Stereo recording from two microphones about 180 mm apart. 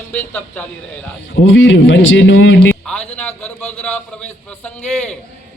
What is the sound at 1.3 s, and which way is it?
A man's voice, 90° left.